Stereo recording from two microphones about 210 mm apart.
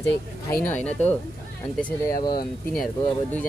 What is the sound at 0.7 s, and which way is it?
Speech, 5° left (ahead or behind).